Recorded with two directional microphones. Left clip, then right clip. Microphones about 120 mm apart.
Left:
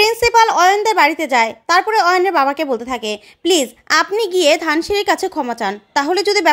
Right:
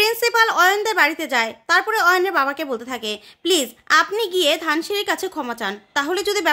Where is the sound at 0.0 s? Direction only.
35° left (ahead or behind).